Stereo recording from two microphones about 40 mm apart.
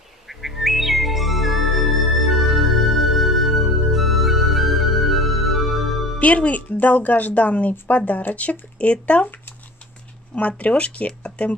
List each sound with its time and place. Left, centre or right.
0.3 s music: centre
6.1 s speech: left
10.3 s speech: left